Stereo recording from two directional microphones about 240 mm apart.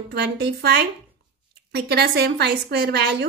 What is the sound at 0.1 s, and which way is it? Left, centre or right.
A woman's voice, right.